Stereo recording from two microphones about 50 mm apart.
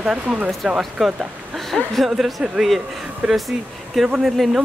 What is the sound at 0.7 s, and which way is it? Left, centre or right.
Speech, centre.